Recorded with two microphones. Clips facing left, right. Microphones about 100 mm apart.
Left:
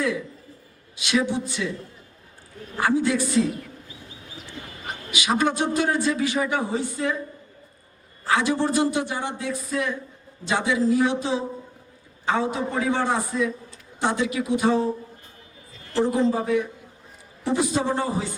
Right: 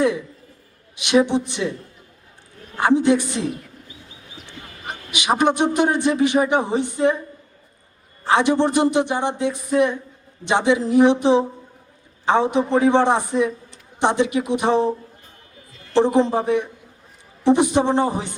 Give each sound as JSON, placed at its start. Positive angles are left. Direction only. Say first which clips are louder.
{"t": 0.9, "sound": "speech", "louder": "right 6 dB", "side_deg": -20}
{"t": 2.8, "sound": "a man's voice", "louder": "right 5 dB", "side_deg": -25}
{"t": 8.2, "sound": "speech", "louder": "right 5 dB", "side_deg": -25}
{"t": 16.0, "sound": "speech", "louder": "right 5 dB", "side_deg": -25}